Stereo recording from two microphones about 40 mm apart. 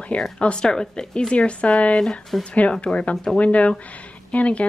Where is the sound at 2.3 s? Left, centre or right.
Centre.